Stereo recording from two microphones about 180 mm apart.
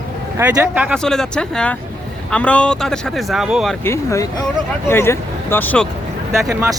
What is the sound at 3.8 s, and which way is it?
Speech, 15° left (ahead or behind).